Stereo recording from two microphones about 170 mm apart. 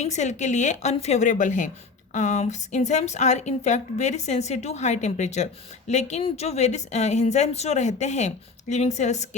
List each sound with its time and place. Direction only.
0.0 s a woman's voice: 45° left (ahead or behind)